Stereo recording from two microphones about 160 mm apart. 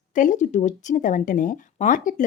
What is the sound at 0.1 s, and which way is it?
Speech, 55° left (ahead or behind).